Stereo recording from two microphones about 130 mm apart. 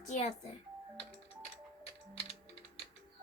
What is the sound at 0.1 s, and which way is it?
Speech, 65° left (ahead or behind).